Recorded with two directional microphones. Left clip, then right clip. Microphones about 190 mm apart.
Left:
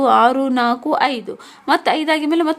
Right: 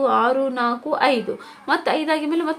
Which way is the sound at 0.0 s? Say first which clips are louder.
Left 5 dB; 35° left (ahead or behind).